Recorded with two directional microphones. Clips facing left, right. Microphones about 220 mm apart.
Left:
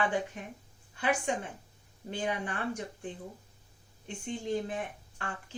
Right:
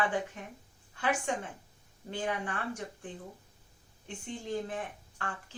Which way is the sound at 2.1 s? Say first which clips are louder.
Left 1 dB; 20° left (ahead or behind).